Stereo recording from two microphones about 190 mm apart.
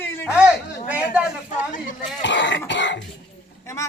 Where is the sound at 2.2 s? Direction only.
70° left (ahead or behind).